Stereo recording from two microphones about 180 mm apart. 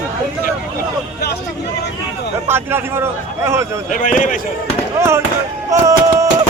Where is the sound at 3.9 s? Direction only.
45° left (ahead or behind).